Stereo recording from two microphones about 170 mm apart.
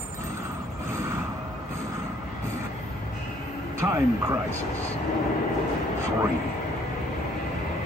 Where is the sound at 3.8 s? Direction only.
15° right (ahead or behind).